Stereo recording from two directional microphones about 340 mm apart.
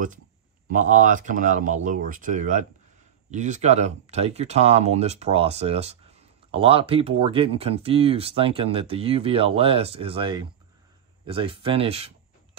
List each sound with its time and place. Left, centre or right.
0.7 s speech: right